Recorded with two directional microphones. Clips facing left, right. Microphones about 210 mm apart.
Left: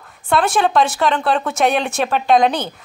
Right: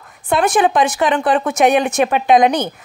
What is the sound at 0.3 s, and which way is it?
Speech, 15° right (ahead or behind).